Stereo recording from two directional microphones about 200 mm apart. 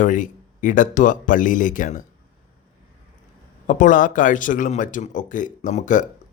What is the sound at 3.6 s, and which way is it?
Speech, 40° left (ahead or behind).